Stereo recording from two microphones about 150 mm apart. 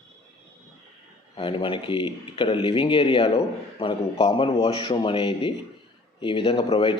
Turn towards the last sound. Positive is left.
turn(degrees=35)  # may be behind; listen again after turning